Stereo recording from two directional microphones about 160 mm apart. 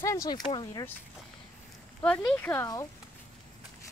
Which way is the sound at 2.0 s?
10° left (ahead or behind).